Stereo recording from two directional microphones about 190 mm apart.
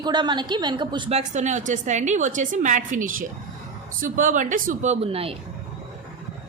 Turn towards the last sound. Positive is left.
turn(degrees=-30)  # may be behind; listen again after turning